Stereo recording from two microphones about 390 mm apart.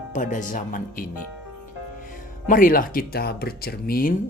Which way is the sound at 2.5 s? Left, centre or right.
Left.